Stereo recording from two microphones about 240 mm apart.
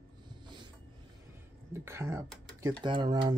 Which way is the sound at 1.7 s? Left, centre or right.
Centre.